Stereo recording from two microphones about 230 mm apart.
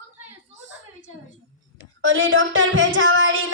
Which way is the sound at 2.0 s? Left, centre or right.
Right.